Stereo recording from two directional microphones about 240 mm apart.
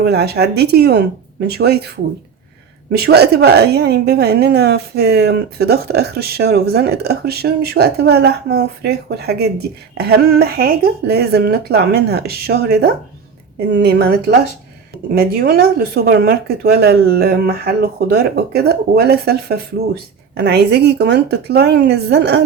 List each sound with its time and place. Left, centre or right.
0.0 s a woman's voice: right
2.9 s a woman's voice: right